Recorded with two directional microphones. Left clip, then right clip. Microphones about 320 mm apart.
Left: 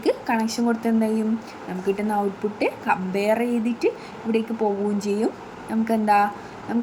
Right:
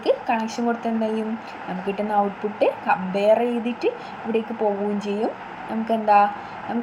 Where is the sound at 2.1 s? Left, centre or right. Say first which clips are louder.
Right 2 dB; centre.